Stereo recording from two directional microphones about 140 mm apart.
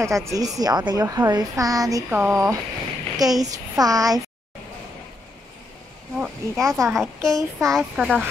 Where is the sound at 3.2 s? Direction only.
25° right (ahead or behind).